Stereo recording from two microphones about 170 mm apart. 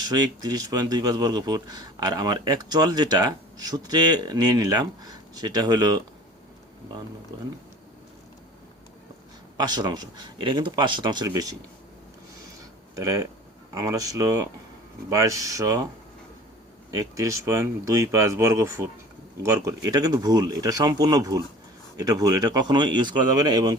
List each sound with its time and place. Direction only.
0.1 s speech: 25° right (ahead or behind)
9.6 s speech: 25° right (ahead or behind)
13.0 s speech: 20° right (ahead or behind)
17.2 s speech: 15° right (ahead or behind)